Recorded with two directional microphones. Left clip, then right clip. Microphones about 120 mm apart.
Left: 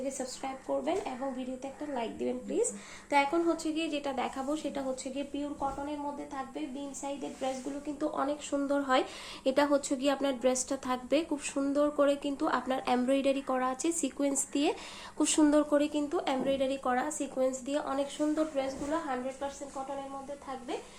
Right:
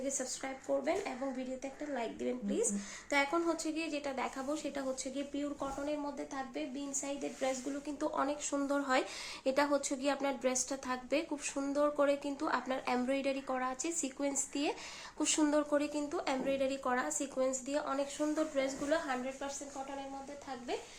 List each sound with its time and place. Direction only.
0.0 s speech: 15° right (ahead or behind)
2.2 s speech: 10° right (ahead or behind)
8.0 s speech: 20° right (ahead or behind)
8.4 s speech: 5° right (ahead or behind)
9.4 s a woman's voice: 15° left (ahead or behind)
16.0 s speech: 5° left (ahead or behind)
18.6 s a woman's voice: 30° right (ahead or behind)